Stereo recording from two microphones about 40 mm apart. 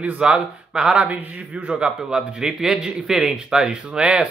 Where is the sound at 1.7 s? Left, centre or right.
Right.